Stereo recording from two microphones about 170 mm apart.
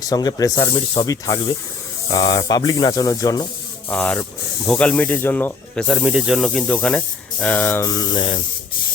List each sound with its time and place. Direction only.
0.0 s speech: 20° left (ahead or behind)
3.8 s speech: 5° left (ahead or behind)
6.0 s speech: 5° right (ahead or behind); by 8.4 s 25° left (ahead or behind)